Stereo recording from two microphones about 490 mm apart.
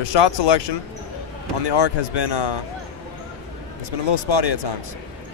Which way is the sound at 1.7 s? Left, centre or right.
Left.